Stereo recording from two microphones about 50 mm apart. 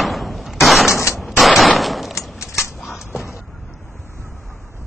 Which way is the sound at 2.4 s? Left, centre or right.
Left.